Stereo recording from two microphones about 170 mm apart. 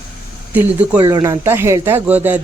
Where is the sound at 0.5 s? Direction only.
10° right (ahead or behind).